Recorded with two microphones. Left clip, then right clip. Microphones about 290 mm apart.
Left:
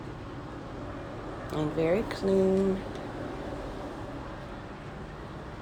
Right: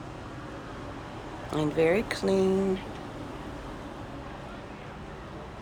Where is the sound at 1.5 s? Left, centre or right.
Centre.